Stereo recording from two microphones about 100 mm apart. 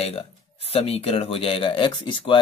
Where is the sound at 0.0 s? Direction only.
75° left (ahead or behind).